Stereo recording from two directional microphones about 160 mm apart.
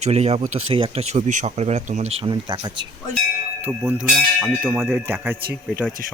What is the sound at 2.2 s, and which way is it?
Speech, 30° right (ahead or behind).